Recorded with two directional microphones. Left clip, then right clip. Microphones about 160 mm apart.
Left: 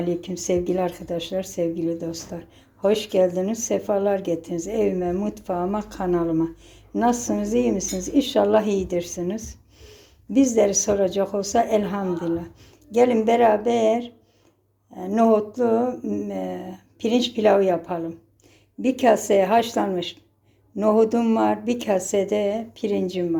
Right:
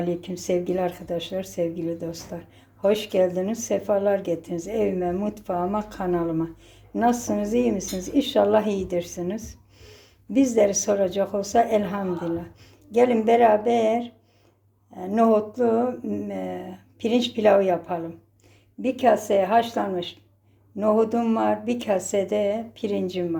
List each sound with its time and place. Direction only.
0.0 s a woman's voice: 10° left (ahead or behind)